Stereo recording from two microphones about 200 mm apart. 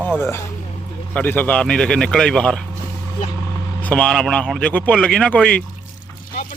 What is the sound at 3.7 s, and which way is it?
Speech, 5° left (ahead or behind).